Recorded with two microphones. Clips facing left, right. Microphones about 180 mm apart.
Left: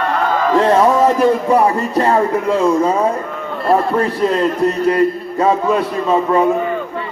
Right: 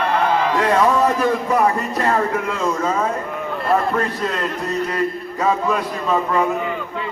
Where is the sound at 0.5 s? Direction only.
30° left (ahead or behind).